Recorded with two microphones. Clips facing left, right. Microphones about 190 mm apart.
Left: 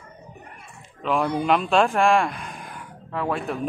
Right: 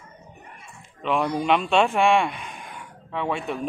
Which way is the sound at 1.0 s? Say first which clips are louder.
Left 1 dB; centre (ahead or behind).